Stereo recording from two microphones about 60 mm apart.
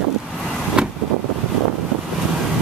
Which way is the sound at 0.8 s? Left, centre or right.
Centre.